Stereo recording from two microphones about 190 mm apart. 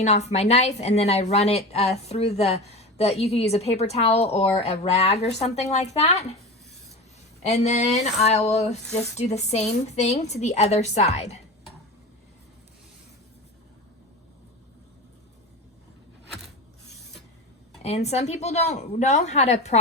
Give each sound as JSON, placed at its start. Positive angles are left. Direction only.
{"t": 0.0, "sound": "a woman's voice", "side_deg": 35}
{"t": 7.4, "sound": "a woman's voice", "side_deg": 35}
{"t": 17.8, "sound": "a woman's voice", "side_deg": 35}